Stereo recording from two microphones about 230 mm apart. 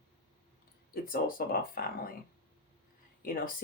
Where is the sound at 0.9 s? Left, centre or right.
Left.